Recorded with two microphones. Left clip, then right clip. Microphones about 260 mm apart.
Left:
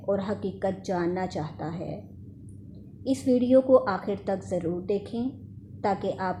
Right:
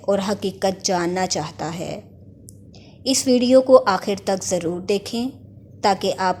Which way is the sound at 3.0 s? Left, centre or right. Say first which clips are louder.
Right 7 dB; right.